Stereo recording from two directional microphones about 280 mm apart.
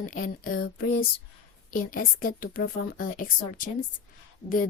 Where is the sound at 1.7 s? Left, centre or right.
Left.